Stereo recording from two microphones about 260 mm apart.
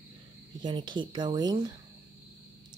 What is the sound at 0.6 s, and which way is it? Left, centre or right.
Speech, centre.